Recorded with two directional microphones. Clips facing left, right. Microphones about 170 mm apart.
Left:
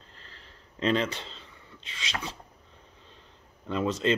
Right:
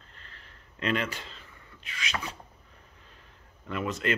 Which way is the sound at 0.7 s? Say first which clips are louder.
Left 4 dB; 30° left (ahead or behind).